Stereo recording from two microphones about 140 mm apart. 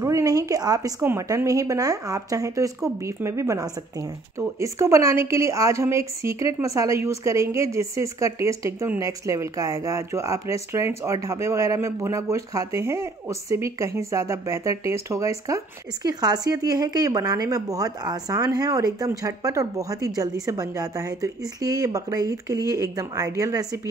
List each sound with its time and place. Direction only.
0.0 s speech: 25° right (ahead or behind)